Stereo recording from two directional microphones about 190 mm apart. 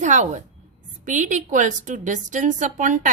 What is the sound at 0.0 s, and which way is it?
A woman's voice, 40° right (ahead or behind).